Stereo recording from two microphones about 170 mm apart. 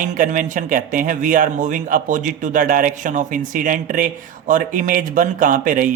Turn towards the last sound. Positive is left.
turn(degrees=-50)  # may be behind; listen again after turning